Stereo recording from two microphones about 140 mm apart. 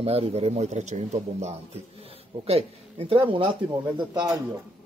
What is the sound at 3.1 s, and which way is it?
Speech, 40° right (ahead or behind).